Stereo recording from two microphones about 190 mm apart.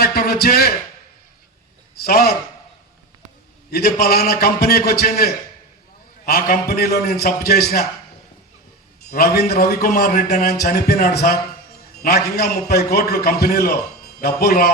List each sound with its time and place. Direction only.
0.0 s speech: 55° left (ahead or behind)
2.0 s a man's voice: 55° left (ahead or behind)
3.7 s a man's voice: 55° left (ahead or behind)
9.1 s a man's voice: 55° left (ahead or behind)